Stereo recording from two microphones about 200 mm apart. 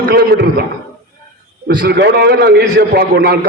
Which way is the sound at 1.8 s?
55° right (ahead or behind).